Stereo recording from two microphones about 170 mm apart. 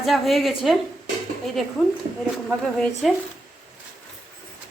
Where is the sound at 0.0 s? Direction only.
Centre (ahead or behind).